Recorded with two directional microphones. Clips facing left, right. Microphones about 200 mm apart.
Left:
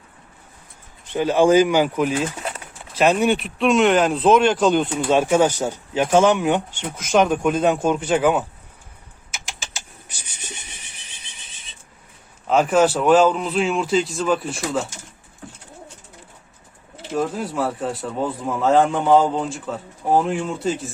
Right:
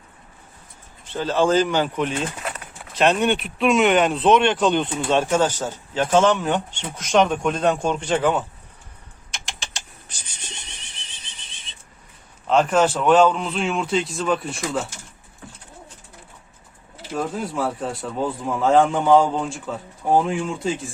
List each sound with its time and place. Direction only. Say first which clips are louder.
1.1 s speech: left 4 dB; 15° left (ahead or behind)
9.3 s a sound: even; centre (ahead or behind)
12.5 s speech: left 1 dB; 5° left (ahead or behind)
17.2 s speech: left 2 dB; centre (ahead or behind)